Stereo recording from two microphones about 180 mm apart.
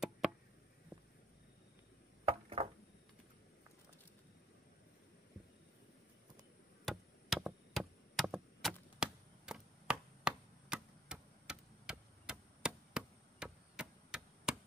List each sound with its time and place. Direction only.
2.2 s chop: 35° right (ahead or behind)
6.8 s chop: centre (ahead or behind)